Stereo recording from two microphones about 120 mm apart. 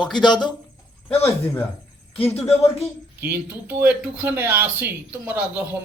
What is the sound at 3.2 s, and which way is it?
A man's voice, 20° right (ahead or behind).